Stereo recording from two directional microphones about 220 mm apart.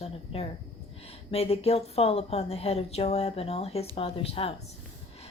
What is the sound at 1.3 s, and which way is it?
Speech, 30° left (ahead or behind).